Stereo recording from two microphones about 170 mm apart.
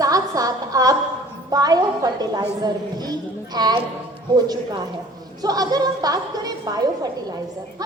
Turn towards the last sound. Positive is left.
turn(degrees=-20)  # may be behind; listen again after turning